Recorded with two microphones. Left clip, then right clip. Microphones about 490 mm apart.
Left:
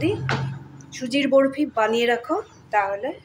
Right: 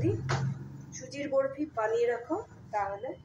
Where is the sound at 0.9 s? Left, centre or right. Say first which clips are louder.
Left 12 dB; centre.